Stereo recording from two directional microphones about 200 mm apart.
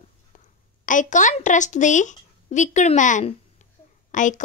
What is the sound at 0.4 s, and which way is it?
A woman's voice, 40° left (ahead or behind).